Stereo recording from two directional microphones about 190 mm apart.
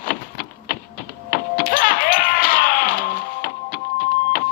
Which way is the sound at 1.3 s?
45° left (ahead or behind).